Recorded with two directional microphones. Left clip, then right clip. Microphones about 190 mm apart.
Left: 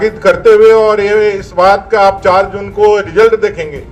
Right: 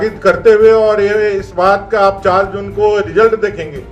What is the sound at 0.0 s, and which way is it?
A man's voice, 35° left (ahead or behind).